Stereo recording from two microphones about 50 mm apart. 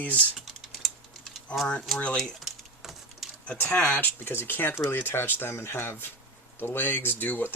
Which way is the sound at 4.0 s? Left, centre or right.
Left.